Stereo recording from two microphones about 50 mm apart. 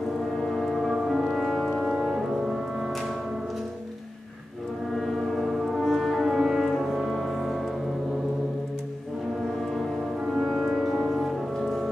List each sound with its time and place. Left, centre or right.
0.4 s music: centre
4.9 s brass instrument: centre
6.8 s music: centre
10.4 s music: centre
11.5 s music: centre